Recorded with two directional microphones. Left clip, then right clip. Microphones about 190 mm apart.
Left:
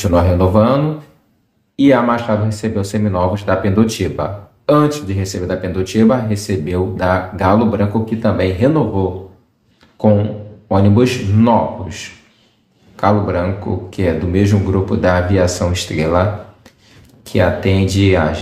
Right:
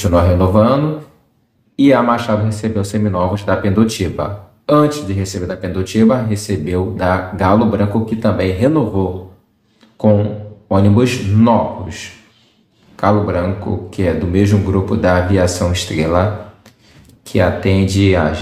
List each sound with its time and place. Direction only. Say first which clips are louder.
0.0 s speech: even; 5° left (ahead or behind)